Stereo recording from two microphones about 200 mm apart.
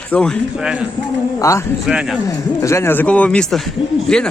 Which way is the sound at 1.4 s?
15° left (ahead or behind).